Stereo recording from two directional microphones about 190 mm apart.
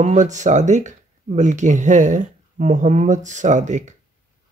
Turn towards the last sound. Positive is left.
turn(degrees=-40)  # may be behind; listen again after turning